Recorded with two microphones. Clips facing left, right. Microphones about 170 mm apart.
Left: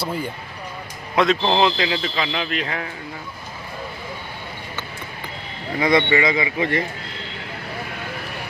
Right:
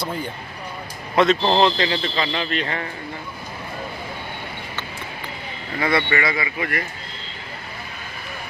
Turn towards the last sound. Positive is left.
turn(degrees=25)  # may be behind; listen again after turning